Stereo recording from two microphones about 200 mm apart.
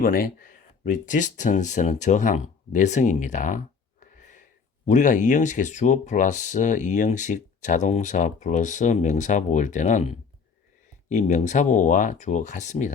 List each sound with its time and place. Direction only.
0.0 s speech: 45° left (ahead or behind)
4.0 s wheeze: 40° left (ahead or behind)
4.9 s speech: 40° left (ahead or behind)